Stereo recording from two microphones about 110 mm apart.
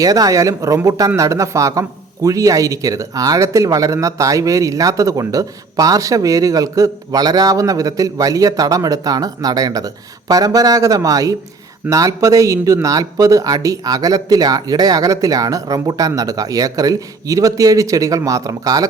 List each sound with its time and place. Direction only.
0.0 s speech: 35° right (ahead or behind)